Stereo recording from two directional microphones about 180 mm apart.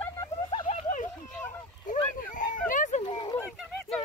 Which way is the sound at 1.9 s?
45° left (ahead or behind).